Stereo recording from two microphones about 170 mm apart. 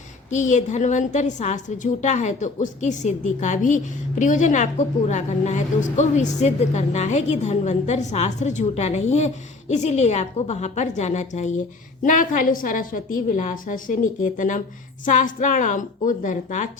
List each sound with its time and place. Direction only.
0.3 s a woman's voice: 45° left (ahead or behind)